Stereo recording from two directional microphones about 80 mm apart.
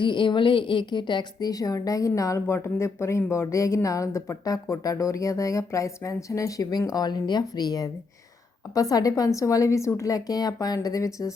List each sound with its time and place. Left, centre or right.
0.0 s a woman's voice: left